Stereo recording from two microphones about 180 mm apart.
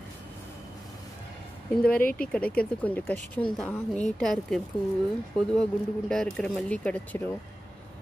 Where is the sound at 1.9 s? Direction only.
55° left (ahead or behind).